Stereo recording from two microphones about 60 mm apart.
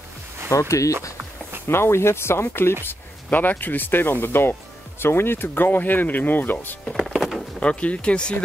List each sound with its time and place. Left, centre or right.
0.5 s speech: left
1.7 s speech: left
2.9 s speech: left
6.8 s music: centre
7.1 s a sound: centre
7.3 s speech: left